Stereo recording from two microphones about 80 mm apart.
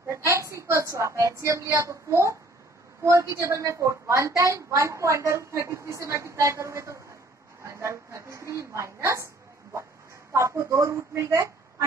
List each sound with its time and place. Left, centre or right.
0.1 s a woman's voice: right
10.3 s a woman's voice: right